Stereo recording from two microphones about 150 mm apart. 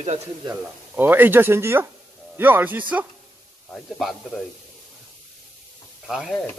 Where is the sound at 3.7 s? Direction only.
Centre (ahead or behind).